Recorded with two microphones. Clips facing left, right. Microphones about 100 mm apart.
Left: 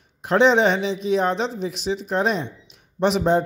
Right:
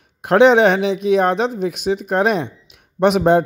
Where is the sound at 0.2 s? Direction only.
60° right (ahead or behind).